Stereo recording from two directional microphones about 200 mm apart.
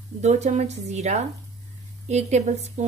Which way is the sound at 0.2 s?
35° right (ahead or behind).